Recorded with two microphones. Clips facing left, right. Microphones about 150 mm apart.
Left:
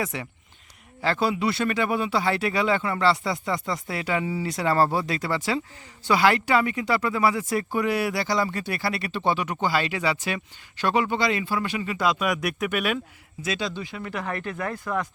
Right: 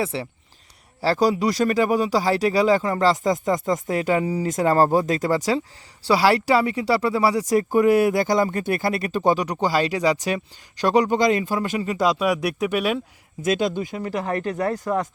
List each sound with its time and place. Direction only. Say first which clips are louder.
0.0 s speech: right 4 dB; 30° right (ahead or behind)
13.4 s speech: right 7 dB; 50° right (ahead or behind)